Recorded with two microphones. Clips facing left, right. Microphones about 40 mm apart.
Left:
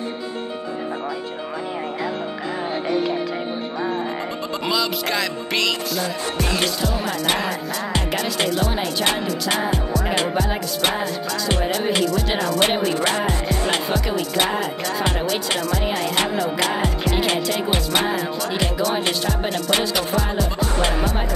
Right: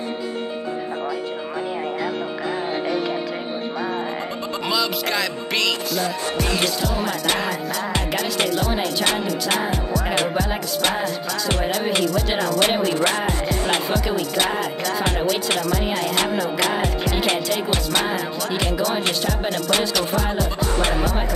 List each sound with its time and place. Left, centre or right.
4.6 s music: centre
8.5 s music: left